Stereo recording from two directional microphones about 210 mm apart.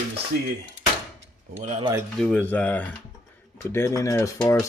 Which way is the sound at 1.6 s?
30° right (ahead or behind).